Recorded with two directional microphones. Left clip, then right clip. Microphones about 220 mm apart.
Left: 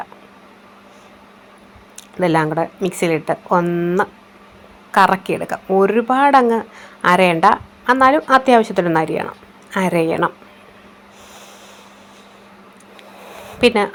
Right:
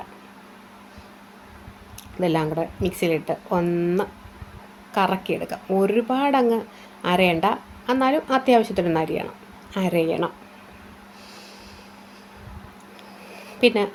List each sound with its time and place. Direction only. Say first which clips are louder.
2.2 s a woman's voice: left 7 dB; 20° left (ahead or behind)
13.6 s speech: left 5 dB; 15° left (ahead or behind)